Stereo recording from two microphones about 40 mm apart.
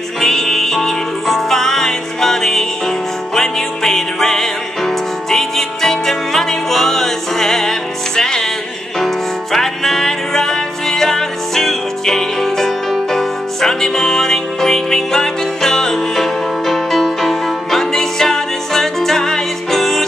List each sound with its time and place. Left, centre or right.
0.2 s music: centre